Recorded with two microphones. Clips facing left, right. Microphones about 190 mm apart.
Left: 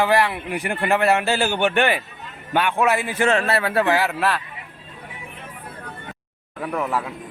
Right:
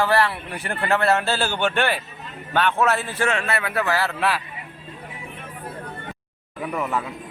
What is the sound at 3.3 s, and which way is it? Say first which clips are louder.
Speech: left 6 dB; 35° left (ahead or behind).